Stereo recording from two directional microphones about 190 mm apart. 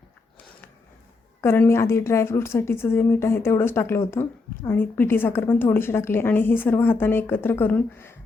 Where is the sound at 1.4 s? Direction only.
15° left (ahead or behind).